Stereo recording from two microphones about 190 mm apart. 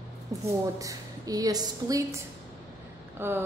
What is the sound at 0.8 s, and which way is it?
A woman's voice, 15° right (ahead or behind).